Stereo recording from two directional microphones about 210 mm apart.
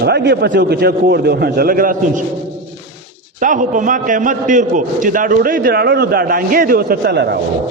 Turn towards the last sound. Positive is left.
turn(degrees=-50)  # may be behind; listen again after turning